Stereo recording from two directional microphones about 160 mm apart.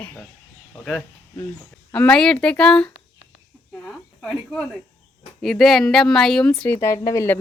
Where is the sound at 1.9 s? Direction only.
5° left (ahead or behind).